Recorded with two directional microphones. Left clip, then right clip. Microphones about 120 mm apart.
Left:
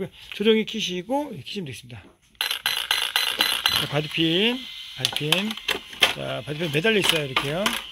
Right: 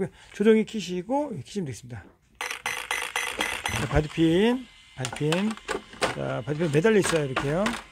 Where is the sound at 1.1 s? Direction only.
5° right (ahead or behind).